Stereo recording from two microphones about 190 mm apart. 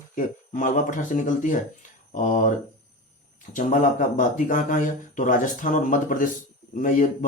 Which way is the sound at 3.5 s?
45° left (ahead or behind).